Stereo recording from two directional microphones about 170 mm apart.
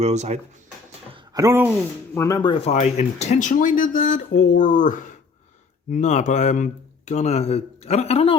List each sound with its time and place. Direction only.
0.0 s speech: 40° right (ahead or behind)
1.1 s a sound: 20° right (ahead or behind)
2.1 s speech: 20° left (ahead or behind); by 8.4 s 35° left (ahead or behind)